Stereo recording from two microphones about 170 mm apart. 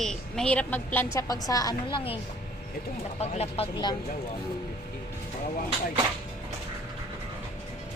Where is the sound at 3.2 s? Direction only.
40° left (ahead or behind).